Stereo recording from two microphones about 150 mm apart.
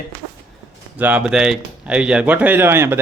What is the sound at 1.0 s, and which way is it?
Speech, 10° right (ahead or behind).